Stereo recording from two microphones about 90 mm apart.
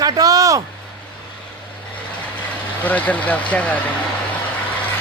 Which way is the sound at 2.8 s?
15° left (ahead or behind).